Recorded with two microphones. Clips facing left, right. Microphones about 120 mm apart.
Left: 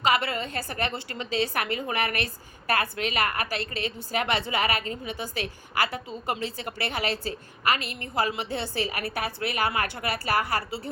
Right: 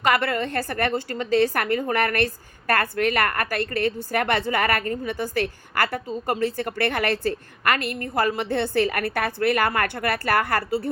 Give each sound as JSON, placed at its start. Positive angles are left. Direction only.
{"t": 0.0, "sound": "a woman's voice", "side_deg": -55}